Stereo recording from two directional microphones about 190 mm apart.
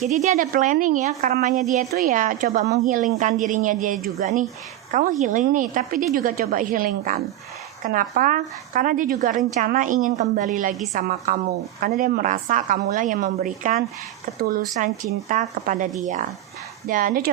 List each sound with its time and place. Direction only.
0.0 s a woman's voice: 35° right (ahead or behind)